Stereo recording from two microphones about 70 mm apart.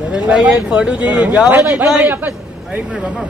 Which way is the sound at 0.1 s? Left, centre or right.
Centre.